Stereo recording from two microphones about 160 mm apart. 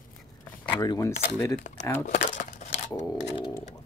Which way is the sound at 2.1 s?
50° left (ahead or behind).